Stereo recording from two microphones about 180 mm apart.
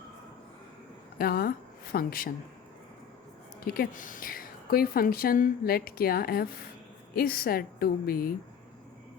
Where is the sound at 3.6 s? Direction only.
55° left (ahead or behind).